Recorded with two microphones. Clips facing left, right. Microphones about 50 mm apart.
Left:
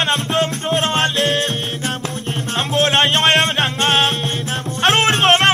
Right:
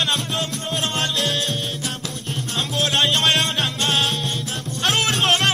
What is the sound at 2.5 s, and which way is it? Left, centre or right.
Music, left.